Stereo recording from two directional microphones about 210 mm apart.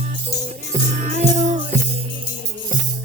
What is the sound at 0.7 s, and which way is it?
Music, 40° right (ahead or behind).